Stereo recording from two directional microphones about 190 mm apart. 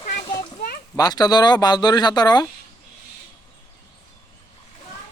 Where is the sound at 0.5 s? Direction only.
50° left (ahead or behind).